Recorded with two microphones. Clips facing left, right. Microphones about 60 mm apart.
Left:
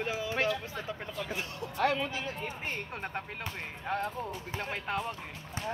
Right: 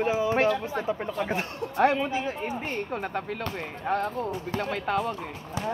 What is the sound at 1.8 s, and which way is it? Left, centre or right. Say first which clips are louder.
Speech: right 7 dB; right.